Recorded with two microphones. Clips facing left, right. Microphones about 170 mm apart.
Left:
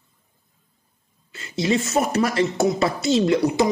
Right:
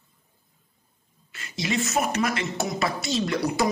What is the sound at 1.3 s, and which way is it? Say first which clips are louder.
Speech: left 7 dB; 30° left (ahead or behind).